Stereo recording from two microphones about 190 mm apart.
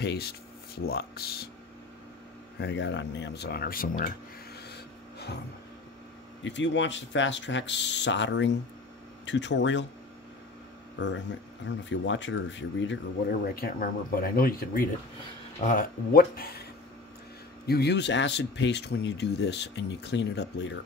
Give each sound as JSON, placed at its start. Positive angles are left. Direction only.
{"t": 0.0, "sound": "speech", "side_deg": 60}
{"t": 2.6, "sound": "speech", "side_deg": 75}
{"t": 4.6, "sound": "a sound", "side_deg": 60}
{"t": 6.4, "sound": "speech", "side_deg": 70}
{"t": 11.0, "sound": "speech", "side_deg": 70}
{"t": 17.6, "sound": "speech", "side_deg": 60}